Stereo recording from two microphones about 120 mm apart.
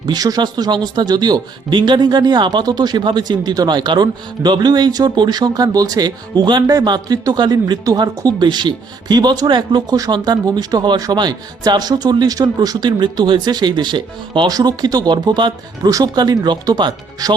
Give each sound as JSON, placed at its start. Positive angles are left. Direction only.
{"t": 0.0, "sound": "speech", "side_deg": -35}